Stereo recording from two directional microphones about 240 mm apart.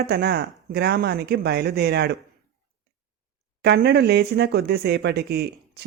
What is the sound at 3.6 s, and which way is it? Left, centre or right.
Speech, right.